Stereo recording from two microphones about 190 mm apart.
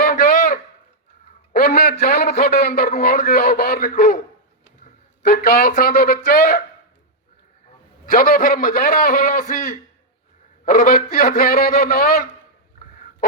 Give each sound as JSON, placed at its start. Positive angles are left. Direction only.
{"t": 0.0, "sound": "a sound", "side_deg": 50}
{"t": 1.5, "sound": "a man's voice", "side_deg": 55}
{"t": 5.2, "sound": "a man's voice", "side_deg": 50}
{"t": 8.0, "sound": "a man's voice", "side_deg": 50}